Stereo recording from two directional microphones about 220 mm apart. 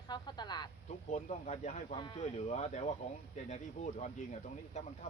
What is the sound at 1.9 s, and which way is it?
Speech, 20° left (ahead or behind).